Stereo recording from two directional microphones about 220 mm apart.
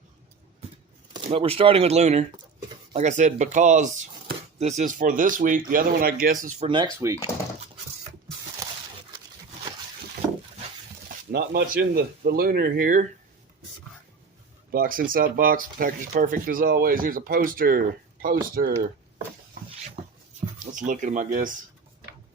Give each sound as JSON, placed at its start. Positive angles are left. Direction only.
{"t": 1.1, "sound": "speech", "side_deg": -25}
{"t": 6.6, "sound": "speech", "side_deg": -20}
{"t": 8.6, "sound": "a sound", "side_deg": -15}
{"t": 11.3, "sound": "speech", "side_deg": -45}
{"t": 14.7, "sound": "speech", "side_deg": -40}
{"t": 20.6, "sound": "speech", "side_deg": -35}